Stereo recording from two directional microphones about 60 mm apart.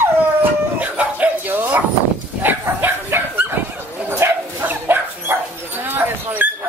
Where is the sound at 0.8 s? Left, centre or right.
Right.